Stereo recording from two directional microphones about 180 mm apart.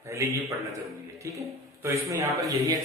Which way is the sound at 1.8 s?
15° right (ahead or behind).